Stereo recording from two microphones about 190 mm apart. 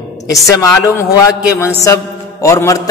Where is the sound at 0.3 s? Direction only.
15° left (ahead or behind).